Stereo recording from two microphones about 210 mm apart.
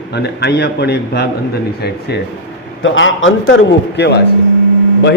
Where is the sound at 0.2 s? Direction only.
50° left (ahead or behind).